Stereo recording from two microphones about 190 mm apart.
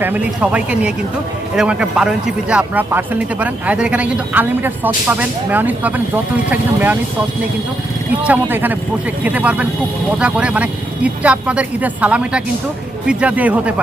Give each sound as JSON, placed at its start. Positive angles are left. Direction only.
{"t": 0.0, "sound": "speech", "side_deg": -10}
{"t": 8.2, "sound": "speech", "side_deg": -10}